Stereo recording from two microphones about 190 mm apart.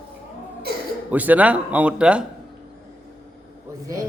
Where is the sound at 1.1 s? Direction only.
10° right (ahead or behind).